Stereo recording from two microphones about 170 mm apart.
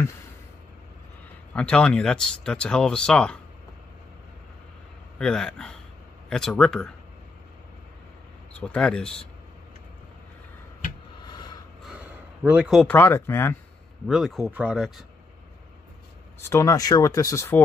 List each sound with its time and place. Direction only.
1.5 s speech: 5° left (ahead or behind)
5.2 s speech: 5° left (ahead or behind)
8.5 s speech: 5° left (ahead or behind)
11.2 s a sound: 25° left (ahead or behind)
12.4 s speech: 5° right (ahead or behind)
12.8 s speech: 10° left (ahead or behind)
14.0 s speech: centre (ahead or behind)
16.4 s speech: 15° left (ahead or behind)